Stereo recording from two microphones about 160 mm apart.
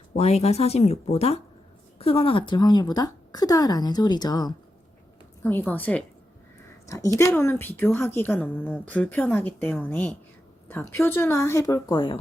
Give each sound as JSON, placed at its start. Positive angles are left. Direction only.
{"t": 0.2, "sound": "speech", "side_deg": 40}
{"t": 5.4, "sound": "a woman's voice", "side_deg": 10}
{"t": 11.9, "sound": "speech", "side_deg": 30}